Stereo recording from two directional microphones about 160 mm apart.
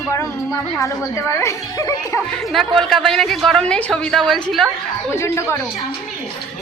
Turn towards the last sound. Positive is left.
turn(degrees=15)  # may be behind; listen again after turning